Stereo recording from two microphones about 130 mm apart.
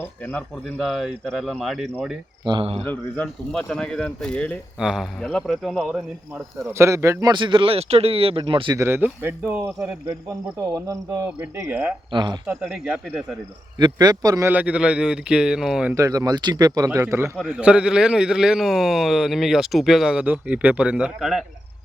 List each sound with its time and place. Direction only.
0.3 s a man's voice: 5° left (ahead or behind)
2.4 s speech: 35° right (ahead or behind)
2.8 s speech: 10° left (ahead or behind); by 7.3 s 25° right (ahead or behind)
7.3 s speech: 40° right (ahead or behind)
8.7 s speech: 20° right (ahead or behind)
10.8 s speech: 25° right (ahead or behind)
12.1 s speech: 35° right (ahead or behind)
12.5 s speech: 10° right (ahead or behind)
13.7 s speech: 35° right (ahead or behind)
14.4 s speech: 10° right (ahead or behind)
16.0 s speech: 25° right (ahead or behind)
17.3 s a man's voice: 10° right (ahead or behind)